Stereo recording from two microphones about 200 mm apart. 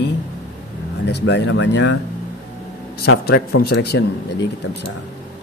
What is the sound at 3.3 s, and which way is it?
Speech, 55° left (ahead or behind).